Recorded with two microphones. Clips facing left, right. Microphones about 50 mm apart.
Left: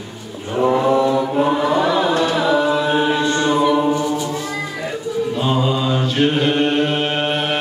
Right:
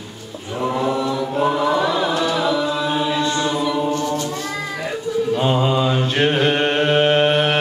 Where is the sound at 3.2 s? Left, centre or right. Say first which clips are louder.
Left 4 dB; left.